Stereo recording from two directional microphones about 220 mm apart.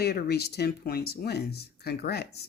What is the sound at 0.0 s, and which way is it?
Speech, 45° left (ahead or behind).